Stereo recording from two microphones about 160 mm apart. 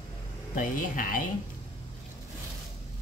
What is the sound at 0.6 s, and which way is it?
Speech, 55° left (ahead or behind).